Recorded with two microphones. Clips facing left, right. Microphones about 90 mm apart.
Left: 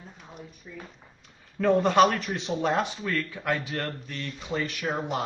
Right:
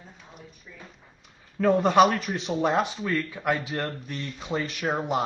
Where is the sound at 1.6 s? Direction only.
5° right (ahead or behind).